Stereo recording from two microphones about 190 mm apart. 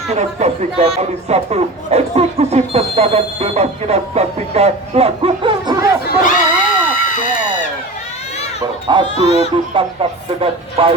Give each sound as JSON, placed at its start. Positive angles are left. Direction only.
{"t": 0.1, "sound": "a man's voice", "side_deg": -35}
{"t": 6.1, "sound": "a sound", "side_deg": 45}
{"t": 9.1, "sound": "speech", "side_deg": 35}
{"t": 9.7, "sound": "speech", "side_deg": -30}